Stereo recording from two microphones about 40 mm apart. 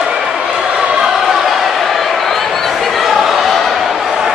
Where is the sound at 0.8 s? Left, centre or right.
Right.